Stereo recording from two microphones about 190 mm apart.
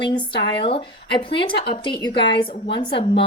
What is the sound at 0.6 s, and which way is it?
Speech, 25° left (ahead or behind).